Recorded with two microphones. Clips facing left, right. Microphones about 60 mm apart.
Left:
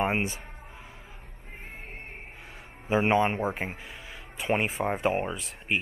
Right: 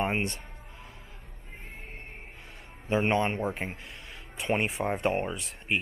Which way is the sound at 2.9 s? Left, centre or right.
Centre.